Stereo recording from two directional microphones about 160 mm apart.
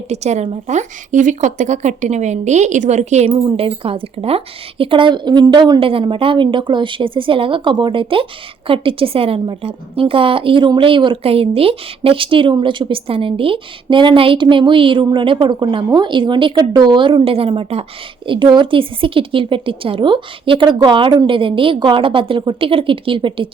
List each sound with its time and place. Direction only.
0.1 s speech: 45° right (ahead or behind)